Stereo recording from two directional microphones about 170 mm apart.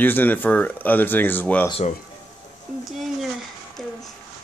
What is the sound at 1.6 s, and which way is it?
Speech, 35° left (ahead or behind).